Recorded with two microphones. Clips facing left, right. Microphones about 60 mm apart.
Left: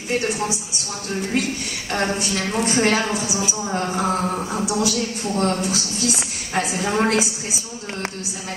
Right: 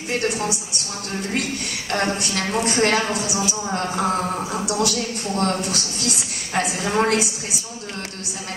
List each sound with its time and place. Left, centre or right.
0.1 s a woman's voice: centre
1.9 s a woman's voice: centre